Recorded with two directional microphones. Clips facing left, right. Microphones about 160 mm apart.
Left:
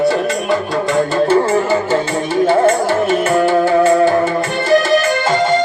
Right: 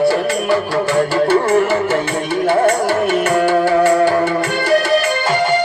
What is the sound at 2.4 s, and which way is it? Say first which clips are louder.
Music: left 2 dB; 25° left (ahead or behind).